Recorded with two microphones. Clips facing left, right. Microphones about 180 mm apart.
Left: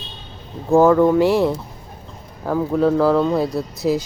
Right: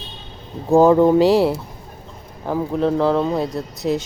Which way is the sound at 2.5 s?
5° right (ahead or behind).